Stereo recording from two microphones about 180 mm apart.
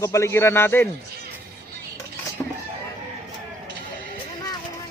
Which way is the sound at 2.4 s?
20° left (ahead or behind).